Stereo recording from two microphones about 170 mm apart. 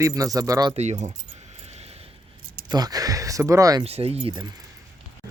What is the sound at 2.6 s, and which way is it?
Speech, 25° right (ahead or behind).